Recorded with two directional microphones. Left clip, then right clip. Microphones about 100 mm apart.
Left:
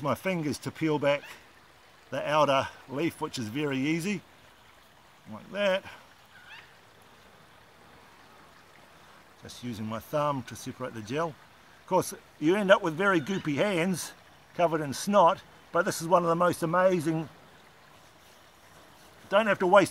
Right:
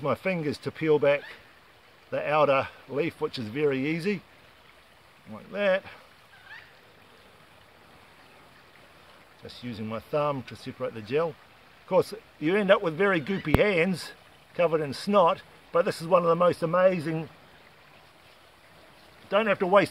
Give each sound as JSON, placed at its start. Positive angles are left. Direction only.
{"t": 0.0, "sound": "speech", "side_deg": -30}
{"t": 5.3, "sound": "speech", "side_deg": -30}
{"t": 9.5, "sound": "speech", "side_deg": -30}
{"t": 19.2, "sound": "speech", "side_deg": -25}